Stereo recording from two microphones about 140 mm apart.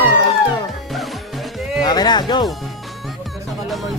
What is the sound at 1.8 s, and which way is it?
Speech, 30° left (ahead or behind).